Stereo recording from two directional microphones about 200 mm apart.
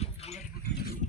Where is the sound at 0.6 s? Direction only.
55° left (ahead or behind).